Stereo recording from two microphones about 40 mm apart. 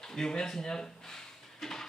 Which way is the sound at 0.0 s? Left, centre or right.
Centre.